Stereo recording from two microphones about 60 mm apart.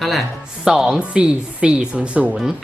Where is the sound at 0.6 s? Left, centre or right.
Centre.